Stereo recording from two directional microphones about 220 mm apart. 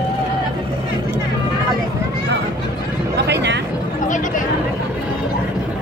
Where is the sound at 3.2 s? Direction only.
50° right (ahead or behind).